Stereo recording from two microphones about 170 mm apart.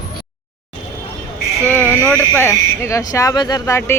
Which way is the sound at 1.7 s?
15° left (ahead or behind).